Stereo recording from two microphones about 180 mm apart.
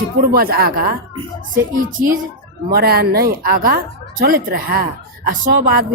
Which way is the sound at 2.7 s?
60° right (ahead or behind).